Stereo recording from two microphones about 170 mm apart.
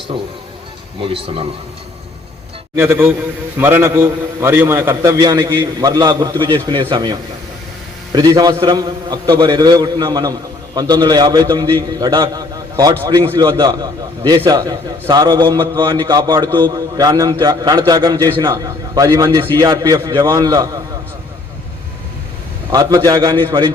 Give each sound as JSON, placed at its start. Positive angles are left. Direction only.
{"t": 1.0, "sound": "a man's voice", "side_deg": -35}
{"t": 2.7, "sound": "a man's voice", "side_deg": -10}
{"t": 22.7, "sound": "a man's voice", "side_deg": -20}